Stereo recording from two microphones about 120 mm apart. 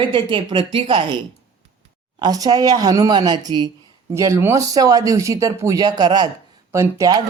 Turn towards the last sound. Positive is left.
turn(degrees=-30)  # may be behind; listen again after turning